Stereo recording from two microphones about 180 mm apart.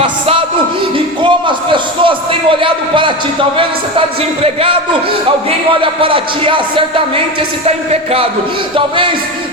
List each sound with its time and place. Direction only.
0.0 s a sound: 30° right (ahead or behind)
4.4 s a man's voice: 30° right (ahead or behind)
5.8 s speech: 30° right (ahead or behind)
8.7 s speech: 30° right (ahead or behind)